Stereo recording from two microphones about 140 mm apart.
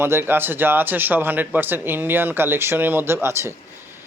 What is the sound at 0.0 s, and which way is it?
A man's voice, 15° right (ahead or behind).